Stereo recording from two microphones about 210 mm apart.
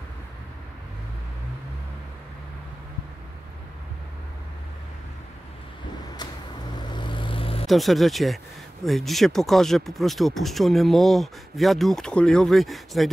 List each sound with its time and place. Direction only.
6.7 s vehicle: 20° left (ahead or behind)
7.6 s speech: centre (ahead or behind)